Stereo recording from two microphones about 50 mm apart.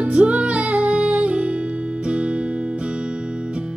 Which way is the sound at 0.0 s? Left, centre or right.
Right.